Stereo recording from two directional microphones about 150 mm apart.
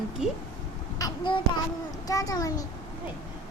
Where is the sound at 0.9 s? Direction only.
25° left (ahead or behind).